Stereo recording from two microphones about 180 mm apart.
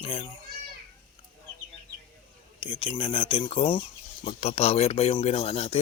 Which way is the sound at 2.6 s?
25° left (ahead or behind).